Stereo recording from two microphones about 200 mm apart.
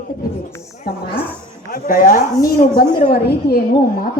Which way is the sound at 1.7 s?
45° left (ahead or behind).